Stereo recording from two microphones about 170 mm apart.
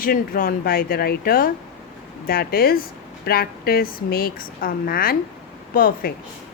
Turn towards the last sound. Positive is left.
turn(degrees=60)  # may be behind; listen again after turning